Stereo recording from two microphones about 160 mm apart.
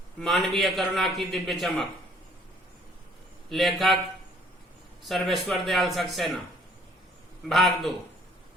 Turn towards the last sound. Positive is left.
turn(degrees=0)  # may be behind; listen again after turning